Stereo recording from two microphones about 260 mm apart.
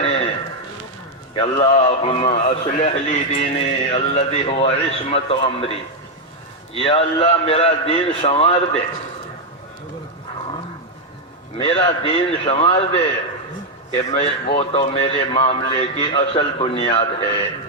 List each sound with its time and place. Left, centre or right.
0.0 s a sound: left
1.4 s a man's voice: left
11.5 s a man's voice: left